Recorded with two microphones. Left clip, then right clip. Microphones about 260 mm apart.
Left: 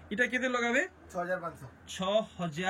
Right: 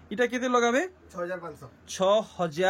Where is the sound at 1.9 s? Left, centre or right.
Centre.